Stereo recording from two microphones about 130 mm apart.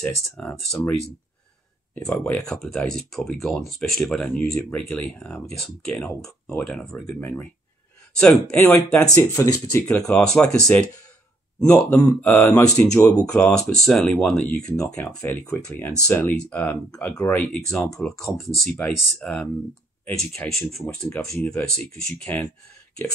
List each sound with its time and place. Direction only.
0.0 s speech: 10° left (ahead or behind)
2.0 s speech: 10° left (ahead or behind)
8.9 s speech: 20° left (ahead or behind)
9.8 s speech: 5° left (ahead or behind)
12.9 s speech: 5° left (ahead or behind)
18.0 s speech: centre (ahead or behind)